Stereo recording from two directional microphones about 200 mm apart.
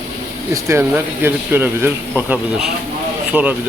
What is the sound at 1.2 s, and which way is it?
Speech, 10° right (ahead or behind).